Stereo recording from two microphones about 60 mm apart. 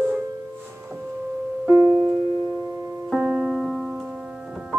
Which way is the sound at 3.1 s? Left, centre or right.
Centre.